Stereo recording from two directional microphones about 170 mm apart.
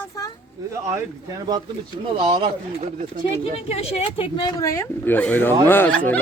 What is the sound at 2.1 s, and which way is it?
Speech, 30° right (ahead or behind).